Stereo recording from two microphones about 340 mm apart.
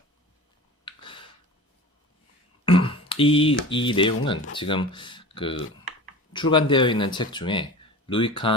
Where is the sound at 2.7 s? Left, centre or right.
Centre.